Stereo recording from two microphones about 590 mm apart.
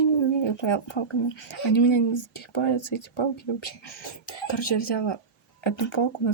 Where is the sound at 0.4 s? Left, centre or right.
Left.